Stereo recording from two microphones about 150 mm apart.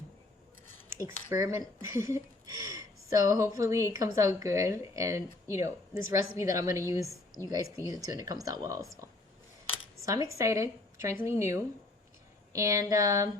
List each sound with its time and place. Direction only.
0.9 s speech: 20° right (ahead or behind)
10.1 s speech: 20° right (ahead or behind)